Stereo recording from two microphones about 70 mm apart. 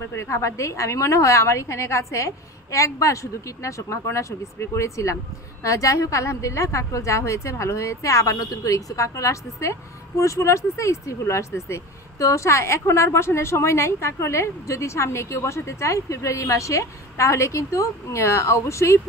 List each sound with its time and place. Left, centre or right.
0.2 s a woman's voice: left